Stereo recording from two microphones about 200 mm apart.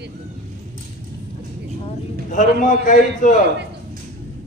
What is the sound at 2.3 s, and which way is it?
A man's voice, 40° left (ahead or behind).